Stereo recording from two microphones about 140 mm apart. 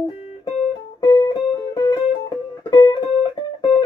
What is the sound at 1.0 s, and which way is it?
Music, 30° left (ahead or behind).